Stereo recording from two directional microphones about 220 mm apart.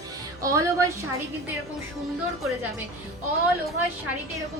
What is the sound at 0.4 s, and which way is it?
Speech, 15° right (ahead or behind).